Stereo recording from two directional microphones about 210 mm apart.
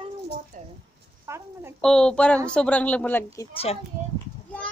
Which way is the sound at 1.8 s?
5° left (ahead or behind).